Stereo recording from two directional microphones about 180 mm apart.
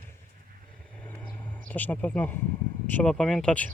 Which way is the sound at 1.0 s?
5° left (ahead or behind).